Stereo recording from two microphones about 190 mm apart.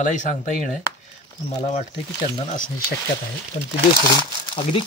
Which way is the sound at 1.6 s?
35° left (ahead or behind).